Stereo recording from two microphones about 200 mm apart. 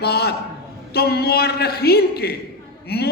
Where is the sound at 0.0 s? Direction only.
55° left (ahead or behind).